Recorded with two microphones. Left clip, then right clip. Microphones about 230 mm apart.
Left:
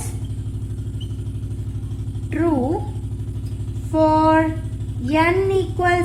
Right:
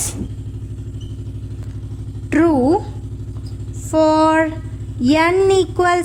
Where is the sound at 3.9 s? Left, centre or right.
Right.